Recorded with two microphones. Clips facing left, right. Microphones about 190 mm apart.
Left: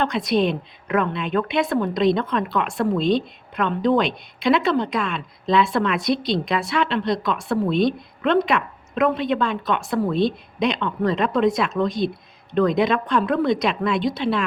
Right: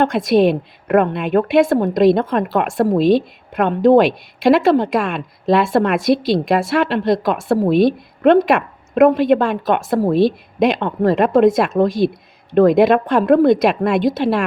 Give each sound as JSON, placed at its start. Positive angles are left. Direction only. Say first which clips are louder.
{"t": 0.0, "sound": "speech", "louder": "right 7 dB", "side_deg": -50}